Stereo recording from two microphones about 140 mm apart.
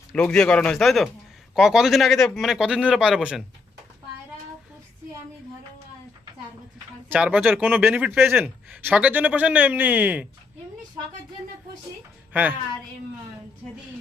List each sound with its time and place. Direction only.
0.1 s speech: 5° left (ahead or behind)
7.1 s speech: 10° right (ahead or behind)
12.3 s speech: 10° right (ahead or behind)